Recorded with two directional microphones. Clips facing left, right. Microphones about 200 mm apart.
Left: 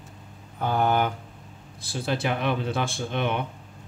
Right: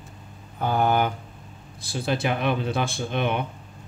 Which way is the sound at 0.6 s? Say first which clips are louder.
Right 1 dB; 10° right (ahead or behind).